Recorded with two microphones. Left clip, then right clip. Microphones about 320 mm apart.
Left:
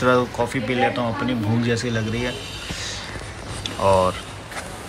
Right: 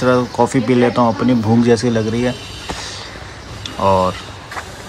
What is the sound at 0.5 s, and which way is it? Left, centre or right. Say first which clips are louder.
Speech: right 8 dB; right.